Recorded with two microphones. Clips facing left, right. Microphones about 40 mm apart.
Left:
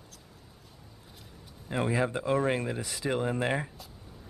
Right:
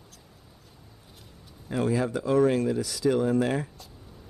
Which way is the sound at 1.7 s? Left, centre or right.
Left.